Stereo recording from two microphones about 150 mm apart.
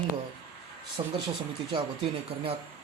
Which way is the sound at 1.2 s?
35° right (ahead or behind).